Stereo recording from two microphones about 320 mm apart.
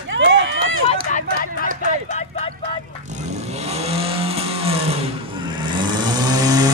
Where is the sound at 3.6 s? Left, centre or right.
Centre.